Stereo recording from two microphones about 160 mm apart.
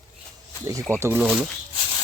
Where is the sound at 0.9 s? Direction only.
15° right (ahead or behind).